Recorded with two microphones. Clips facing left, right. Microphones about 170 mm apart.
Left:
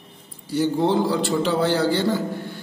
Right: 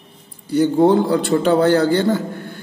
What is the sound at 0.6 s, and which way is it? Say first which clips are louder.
A man's voice: right 6 dB; 55° right (ahead or behind).